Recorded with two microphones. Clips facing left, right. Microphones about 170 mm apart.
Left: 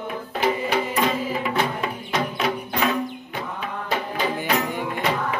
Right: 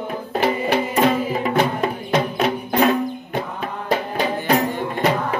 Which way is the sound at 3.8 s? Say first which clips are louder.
Right 4 dB; 40° right (ahead or behind).